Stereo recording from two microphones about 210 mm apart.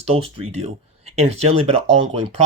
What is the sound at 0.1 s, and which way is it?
Speech, 30° right (ahead or behind).